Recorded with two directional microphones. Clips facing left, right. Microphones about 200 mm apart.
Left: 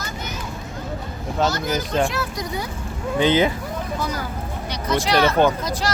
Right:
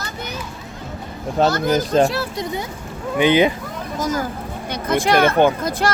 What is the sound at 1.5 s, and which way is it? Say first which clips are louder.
Speech: right 6 dB; 55° right (ahead or behind).